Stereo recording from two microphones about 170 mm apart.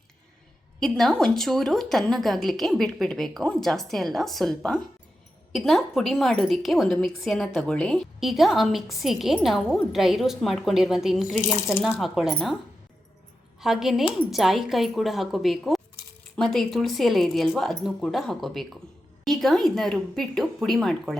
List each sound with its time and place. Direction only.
0.8 s a woman's voice: centre (ahead or behind)
11.3 s speech: 20° left (ahead or behind)
11.9 s a woman's voice: centre (ahead or behind)
13.6 s a woman's voice: centre (ahead or behind)